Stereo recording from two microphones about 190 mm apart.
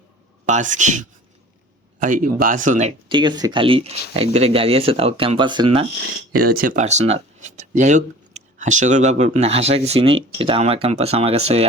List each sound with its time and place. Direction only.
0.4 s speech: 40° right (ahead or behind)
3.1 s speech: 25° right (ahead or behind)
6.4 s speech: 50° right (ahead or behind); by 11.6 s 30° right (ahead or behind)